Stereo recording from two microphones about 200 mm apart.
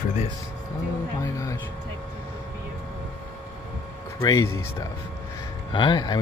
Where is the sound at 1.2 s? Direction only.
15° left (ahead or behind).